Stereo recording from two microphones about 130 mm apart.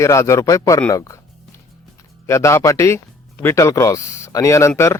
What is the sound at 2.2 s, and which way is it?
Speech, 20° left (ahead or behind).